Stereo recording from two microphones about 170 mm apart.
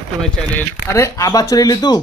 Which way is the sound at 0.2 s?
10° left (ahead or behind).